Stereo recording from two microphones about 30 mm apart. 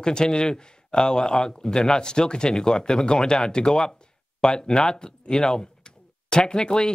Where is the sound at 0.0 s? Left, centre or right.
Left.